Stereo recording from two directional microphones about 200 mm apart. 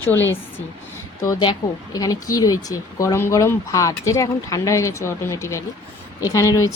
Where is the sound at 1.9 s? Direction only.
20° left (ahead or behind).